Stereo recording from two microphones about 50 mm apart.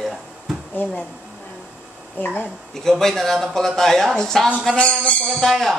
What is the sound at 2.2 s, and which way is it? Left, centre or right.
Speech, left.